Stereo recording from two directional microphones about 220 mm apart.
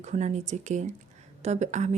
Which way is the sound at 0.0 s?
30° right (ahead or behind).